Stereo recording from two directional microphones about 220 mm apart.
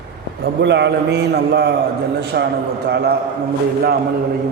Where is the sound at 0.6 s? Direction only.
50° right (ahead or behind).